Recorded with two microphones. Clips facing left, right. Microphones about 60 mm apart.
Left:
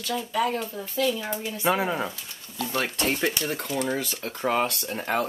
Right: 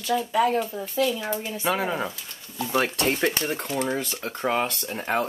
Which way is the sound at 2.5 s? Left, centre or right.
Centre.